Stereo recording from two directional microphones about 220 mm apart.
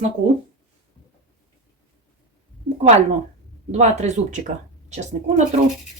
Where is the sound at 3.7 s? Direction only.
30° right (ahead or behind).